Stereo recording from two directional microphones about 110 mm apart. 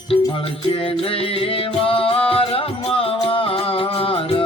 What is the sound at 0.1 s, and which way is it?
Music, 55° left (ahead or behind).